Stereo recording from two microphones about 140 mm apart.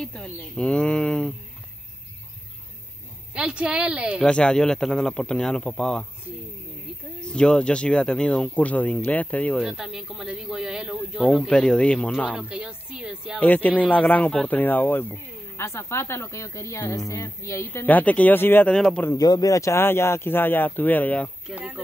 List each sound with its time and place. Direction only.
0.0 s speech: 5° left (ahead or behind)
3.3 s a woman's voice: 5° right (ahead or behind)
4.3 s a man's voice: 5° left (ahead or behind)
7.2 s speech: 5° left (ahead or behind)
9.7 s a man's voice: 5° right (ahead or behind)
12.3 s a man's voice: 5° right (ahead or behind)
13.4 s speech: 10° left (ahead or behind)
18.8 s a man's voice: 5° left (ahead or behind)
19.0 s speech: 30° left (ahead or behind); by 21.3 s 10° left (ahead or behind)
21.5 s a man's voice: 5° right (ahead or behind)